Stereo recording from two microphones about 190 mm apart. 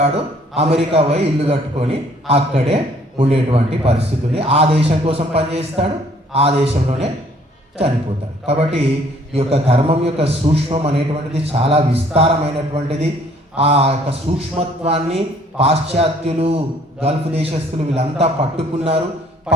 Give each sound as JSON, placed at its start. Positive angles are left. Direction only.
{"t": 0.0, "sound": "a man's voice", "side_deg": -35}
{"t": 8.4, "sound": "a man's voice", "side_deg": -35}
{"t": 19.5, "sound": "mantra", "side_deg": -5}